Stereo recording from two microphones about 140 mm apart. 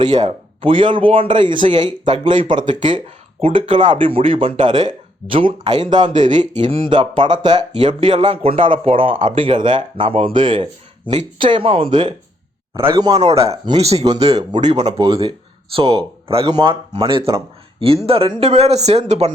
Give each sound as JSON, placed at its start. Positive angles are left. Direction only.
{"t": 0.0, "sound": "speech", "side_deg": -30}
{"t": 12.7, "sound": "a man's voice", "side_deg": -20}
{"t": 13.7, "sound": "speech", "side_deg": -45}
{"t": 16.5, "sound": "a man's voice", "side_deg": -30}
{"t": 16.9, "sound": "speech", "side_deg": -40}